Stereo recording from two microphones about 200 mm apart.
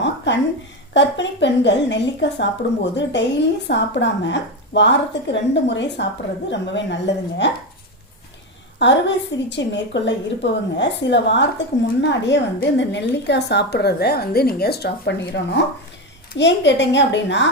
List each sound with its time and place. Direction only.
0.3 s a sound: 60° left (ahead or behind)
0.9 s a woman's voice: 65° left (ahead or behind)
8.8 s a woman's voice: 60° left (ahead or behind)